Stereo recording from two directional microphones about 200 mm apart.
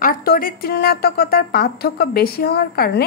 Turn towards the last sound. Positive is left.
turn(degrees=50)  # may be behind; listen again after turning